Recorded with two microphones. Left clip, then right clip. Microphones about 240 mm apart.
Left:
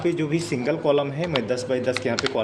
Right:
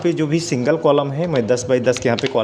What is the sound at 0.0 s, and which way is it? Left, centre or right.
A man's voice, right.